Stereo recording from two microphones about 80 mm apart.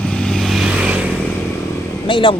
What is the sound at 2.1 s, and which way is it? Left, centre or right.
Speech, left.